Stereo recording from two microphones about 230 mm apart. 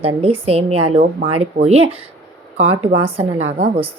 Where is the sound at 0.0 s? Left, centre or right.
Right.